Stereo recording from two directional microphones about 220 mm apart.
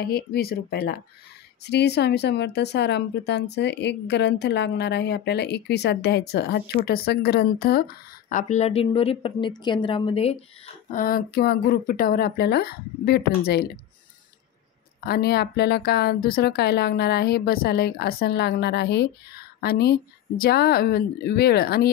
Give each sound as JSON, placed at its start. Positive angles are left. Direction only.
{"t": 0.0, "sound": "speech", "side_deg": 45}
{"t": 15.0, "sound": "speech", "side_deg": 45}